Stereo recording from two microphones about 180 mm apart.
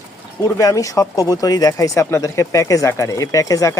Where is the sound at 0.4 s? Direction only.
15° left (ahead or behind).